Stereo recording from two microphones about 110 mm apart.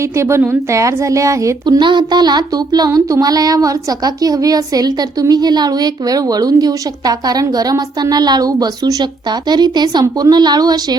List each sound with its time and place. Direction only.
0.0 s a woman's voice: 25° right (ahead or behind)
1.6 s child singing: 45° right (ahead or behind)